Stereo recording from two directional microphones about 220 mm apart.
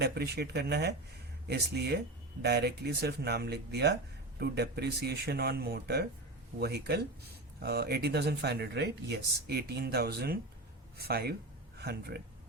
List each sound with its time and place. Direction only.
0.0 s speech: 45° right (ahead or behind)